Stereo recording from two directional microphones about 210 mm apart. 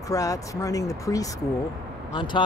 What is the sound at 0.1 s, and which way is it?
Speech, 15° left (ahead or behind).